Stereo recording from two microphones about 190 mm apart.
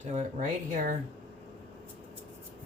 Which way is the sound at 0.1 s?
40° right (ahead or behind).